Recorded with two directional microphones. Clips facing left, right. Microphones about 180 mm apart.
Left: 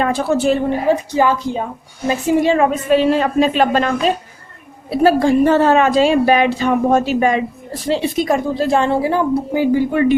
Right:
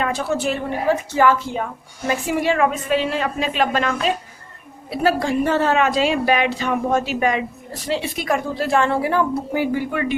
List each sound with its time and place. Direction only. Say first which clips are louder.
0.0 s a woman's voice: left 6 dB; 30° left (ahead or behind)
0.9 s a woman's voice: even; 15° left (ahead or behind)
2.9 s a woman's voice: left 7 dB; 40° left (ahead or behind); by 9.8 s 20° left (ahead or behind)
9.9 s a woman's voice: left 8 dB; 30° left (ahead or behind)